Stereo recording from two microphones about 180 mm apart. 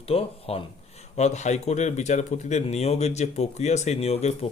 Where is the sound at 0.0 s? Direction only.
35° left (ahead or behind).